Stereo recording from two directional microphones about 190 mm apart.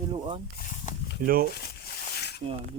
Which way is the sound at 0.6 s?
40° left (ahead or behind).